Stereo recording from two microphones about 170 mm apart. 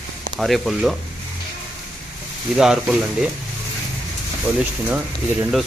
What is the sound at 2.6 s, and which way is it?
Speech, 5° right (ahead or behind).